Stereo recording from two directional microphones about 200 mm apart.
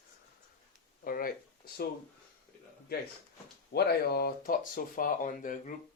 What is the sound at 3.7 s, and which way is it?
Speech, 50° left (ahead or behind).